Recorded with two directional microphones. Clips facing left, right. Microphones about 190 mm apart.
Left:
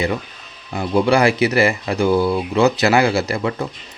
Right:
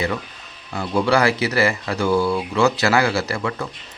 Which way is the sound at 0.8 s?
15° left (ahead or behind).